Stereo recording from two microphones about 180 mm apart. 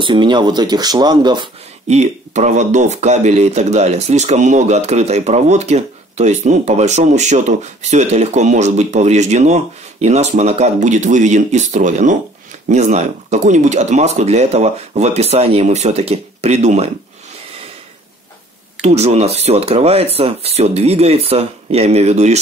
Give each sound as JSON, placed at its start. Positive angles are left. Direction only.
{"t": 0.0, "sound": "speech", "side_deg": -25}
{"t": 1.9, "sound": "speech", "side_deg": -40}
{"t": 18.8, "sound": "speech", "side_deg": -35}